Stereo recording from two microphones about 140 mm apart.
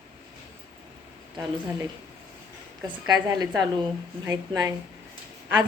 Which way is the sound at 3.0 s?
30° right (ahead or behind).